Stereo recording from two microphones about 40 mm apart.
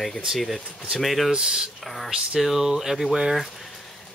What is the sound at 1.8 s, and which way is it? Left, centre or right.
Speech, centre.